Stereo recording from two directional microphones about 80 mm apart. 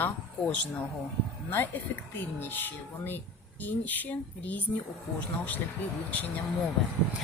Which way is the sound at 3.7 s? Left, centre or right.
Left.